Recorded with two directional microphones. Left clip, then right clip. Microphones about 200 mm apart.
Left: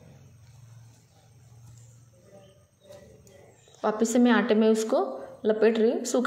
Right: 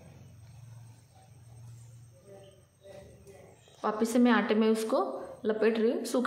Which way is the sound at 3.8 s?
20° left (ahead or behind).